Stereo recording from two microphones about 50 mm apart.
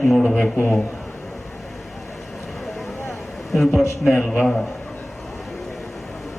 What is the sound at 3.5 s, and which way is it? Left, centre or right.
Speech, centre.